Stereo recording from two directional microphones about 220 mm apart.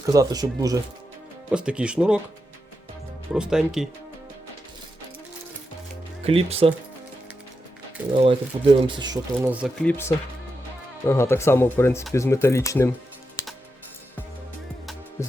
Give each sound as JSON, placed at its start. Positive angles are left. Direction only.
{"t": 0.1, "sound": "speech", "side_deg": -15}
{"t": 1.5, "sound": "speech", "side_deg": -5}
{"t": 3.3, "sound": "speech", "side_deg": -5}
{"t": 6.2, "sound": "speech", "side_deg": -25}
{"t": 8.1, "sound": "speech", "side_deg": -25}
{"t": 9.8, "sound": "speech", "side_deg": 10}
{"t": 15.2, "sound": "music", "side_deg": 15}